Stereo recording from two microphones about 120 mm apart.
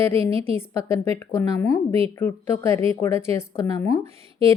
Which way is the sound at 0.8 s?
25° left (ahead or behind).